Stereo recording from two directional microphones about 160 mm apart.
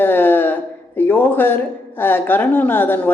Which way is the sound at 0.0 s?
10° left (ahead or behind).